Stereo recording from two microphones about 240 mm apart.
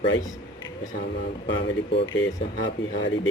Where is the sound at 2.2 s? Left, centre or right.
Left.